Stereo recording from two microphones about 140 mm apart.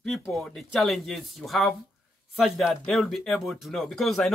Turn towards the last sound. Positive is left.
turn(degrees=0)  # may be behind; listen again after turning